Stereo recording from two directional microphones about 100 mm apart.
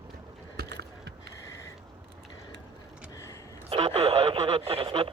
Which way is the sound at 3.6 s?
70° right (ahead or behind).